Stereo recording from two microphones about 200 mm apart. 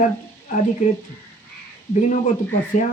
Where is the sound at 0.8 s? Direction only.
35° left (ahead or behind).